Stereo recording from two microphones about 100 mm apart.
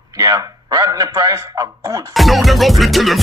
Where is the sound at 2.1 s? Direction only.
Centre (ahead or behind).